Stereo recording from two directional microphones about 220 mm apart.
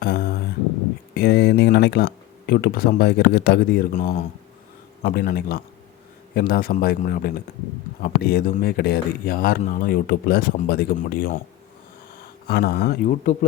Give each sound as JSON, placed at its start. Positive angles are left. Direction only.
{"t": 0.0, "sound": "a sound", "side_deg": 45}
{"t": 1.1, "sound": "a man's voice", "side_deg": 45}
{"t": 12.5, "sound": "speech", "side_deg": 45}